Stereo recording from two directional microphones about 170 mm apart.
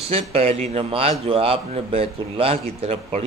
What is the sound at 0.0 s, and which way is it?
A man's voice, 35° right (ahead or behind).